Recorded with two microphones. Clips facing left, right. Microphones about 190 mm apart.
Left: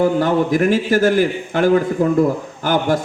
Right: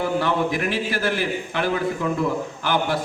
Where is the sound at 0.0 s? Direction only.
45° left (ahead or behind).